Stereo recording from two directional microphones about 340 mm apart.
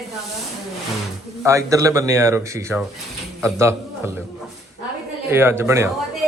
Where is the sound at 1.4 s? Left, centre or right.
Centre.